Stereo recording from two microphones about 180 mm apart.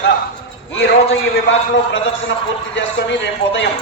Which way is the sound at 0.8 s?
90° left.